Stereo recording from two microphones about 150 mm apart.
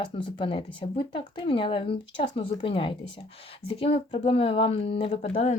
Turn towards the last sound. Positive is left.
turn(degrees=40)  # may be behind; listen again after turning